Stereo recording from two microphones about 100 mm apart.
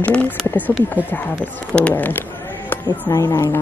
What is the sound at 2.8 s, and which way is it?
Speech, 40° left (ahead or behind).